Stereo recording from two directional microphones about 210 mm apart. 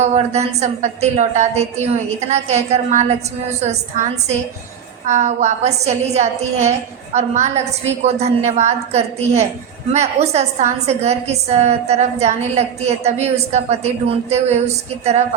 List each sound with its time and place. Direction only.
0.0 s a woman's voice: 30° right (ahead or behind)